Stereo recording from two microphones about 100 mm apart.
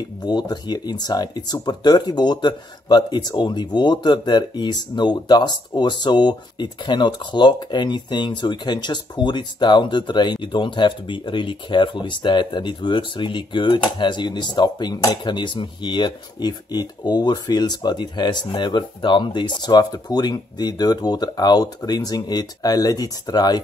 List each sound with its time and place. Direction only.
0.2 s speech: 45° left (ahead or behind)
15.3 s speech: 55° left (ahead or behind)